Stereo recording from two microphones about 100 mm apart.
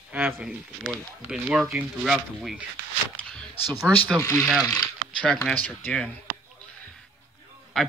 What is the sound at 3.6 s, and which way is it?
Speech, 15° left (ahead or behind).